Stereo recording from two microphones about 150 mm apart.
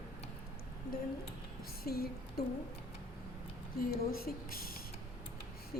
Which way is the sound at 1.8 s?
90° left.